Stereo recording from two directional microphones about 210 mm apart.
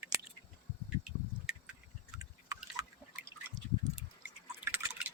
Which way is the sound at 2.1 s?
5° right (ahead or behind).